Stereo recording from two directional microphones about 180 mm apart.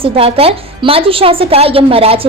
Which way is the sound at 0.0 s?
30° right (ahead or behind).